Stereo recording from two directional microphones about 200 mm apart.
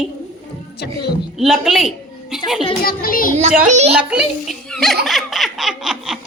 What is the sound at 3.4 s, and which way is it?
Speech, 35° right (ahead or behind).